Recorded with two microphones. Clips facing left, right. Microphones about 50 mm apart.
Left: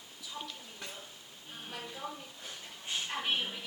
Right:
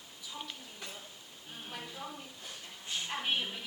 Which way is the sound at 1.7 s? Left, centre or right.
Centre.